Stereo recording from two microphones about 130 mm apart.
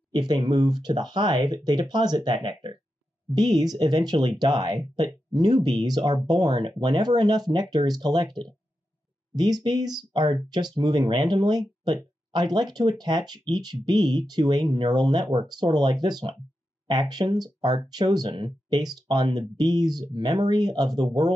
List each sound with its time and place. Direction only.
0.1 s speech: 35° right (ahead or behind)